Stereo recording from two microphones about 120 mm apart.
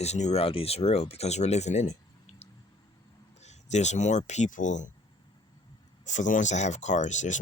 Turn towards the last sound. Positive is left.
turn(degrees=90)